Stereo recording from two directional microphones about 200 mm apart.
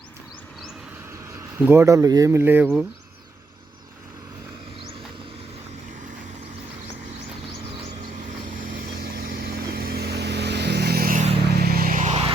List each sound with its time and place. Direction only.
1.3 s speech: 10° right (ahead or behind)
9.0 s vehicle: 50° right (ahead or behind); by 12.3 s 35° right (ahead or behind)